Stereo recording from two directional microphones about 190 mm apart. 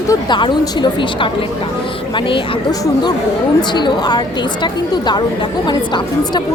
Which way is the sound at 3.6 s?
25° left (ahead or behind).